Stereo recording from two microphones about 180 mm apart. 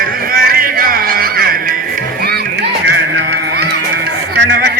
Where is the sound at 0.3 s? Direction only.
55° right (ahead or behind).